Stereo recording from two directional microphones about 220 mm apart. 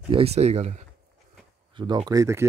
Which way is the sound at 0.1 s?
30° right (ahead or behind).